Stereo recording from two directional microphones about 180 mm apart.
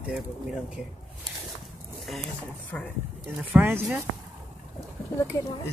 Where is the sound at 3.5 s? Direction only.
10° right (ahead or behind).